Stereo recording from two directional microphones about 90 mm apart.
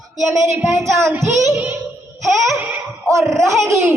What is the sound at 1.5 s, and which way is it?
Music, 20° right (ahead or behind).